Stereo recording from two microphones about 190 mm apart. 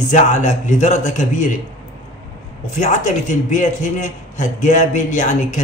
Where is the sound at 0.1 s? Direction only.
40° left (ahead or behind).